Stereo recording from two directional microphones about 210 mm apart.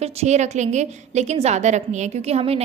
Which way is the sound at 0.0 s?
30° right (ahead or behind).